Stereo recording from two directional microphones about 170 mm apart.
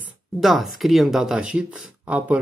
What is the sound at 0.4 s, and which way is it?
Speech, centre (ahead or behind).